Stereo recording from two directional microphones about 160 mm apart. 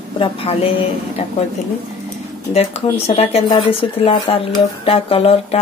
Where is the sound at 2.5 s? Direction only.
40° left (ahead or behind).